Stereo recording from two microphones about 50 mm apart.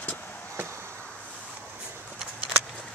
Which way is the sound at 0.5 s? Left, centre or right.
Right.